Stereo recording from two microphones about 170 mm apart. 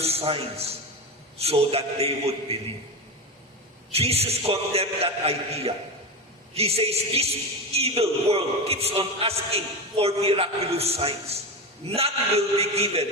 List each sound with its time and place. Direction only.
0.0 s a man's voice: 35° right (ahead or behind)
3.9 s a man's voice: 35° right (ahead or behind)